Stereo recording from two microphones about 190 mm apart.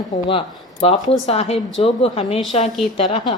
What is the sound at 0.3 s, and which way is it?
A woman's voice, 30° left (ahead or behind).